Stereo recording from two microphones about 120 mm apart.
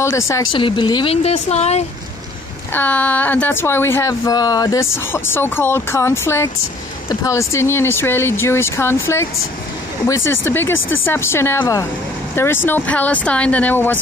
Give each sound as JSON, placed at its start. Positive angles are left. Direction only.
{"t": 0.0, "sound": "speech", "side_deg": 25}
{"t": 0.5, "sound": "speech", "side_deg": 45}
{"t": 1.0, "sound": "speech", "side_deg": 60}
{"t": 2.7, "sound": "speech", "side_deg": 15}